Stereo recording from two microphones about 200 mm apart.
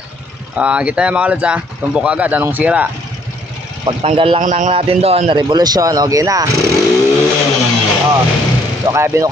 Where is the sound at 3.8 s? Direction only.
25° right (ahead or behind).